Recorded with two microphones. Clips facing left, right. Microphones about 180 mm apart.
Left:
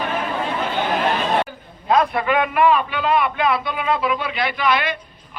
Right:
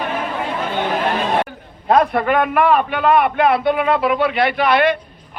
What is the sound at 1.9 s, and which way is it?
A man's voice, 50° right (ahead or behind).